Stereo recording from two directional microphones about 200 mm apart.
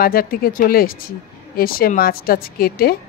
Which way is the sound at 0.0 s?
45° left (ahead or behind).